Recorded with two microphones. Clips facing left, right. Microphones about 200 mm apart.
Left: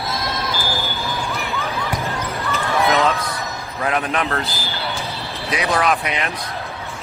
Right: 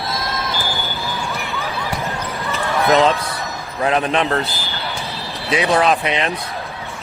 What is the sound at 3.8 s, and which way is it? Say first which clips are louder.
Speech: right 4 dB; 30° right (ahead or behind).